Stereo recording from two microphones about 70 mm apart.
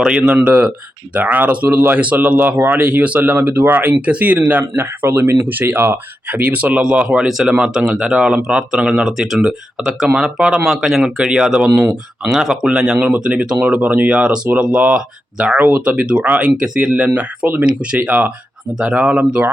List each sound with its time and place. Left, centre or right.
0.2 s speech: right
3.3 s speech: right; by 7.3 s centre
7.3 s speech: centre; by 12.3 s right
12.3 s speech: centre